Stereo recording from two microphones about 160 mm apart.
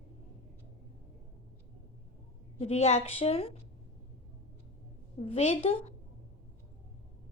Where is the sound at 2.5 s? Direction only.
40° left (ahead or behind).